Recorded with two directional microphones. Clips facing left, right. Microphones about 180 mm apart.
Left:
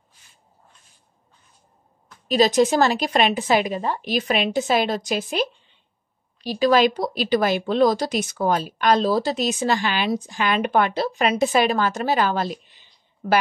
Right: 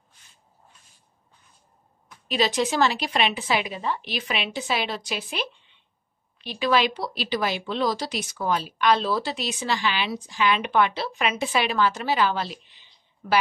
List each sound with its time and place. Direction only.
2.2 s speech: 40° left (ahead or behind)